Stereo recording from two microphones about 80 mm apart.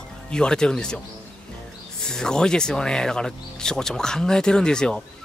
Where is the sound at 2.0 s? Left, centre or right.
Centre.